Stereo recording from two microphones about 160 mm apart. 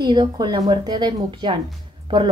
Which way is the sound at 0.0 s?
25° right (ahead or behind).